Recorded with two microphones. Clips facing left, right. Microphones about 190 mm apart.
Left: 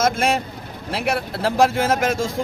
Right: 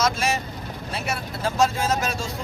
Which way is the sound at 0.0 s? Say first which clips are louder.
Left 4 dB; 55° left (ahead or behind).